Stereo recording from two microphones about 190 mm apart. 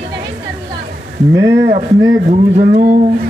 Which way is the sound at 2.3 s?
40° right (ahead or behind).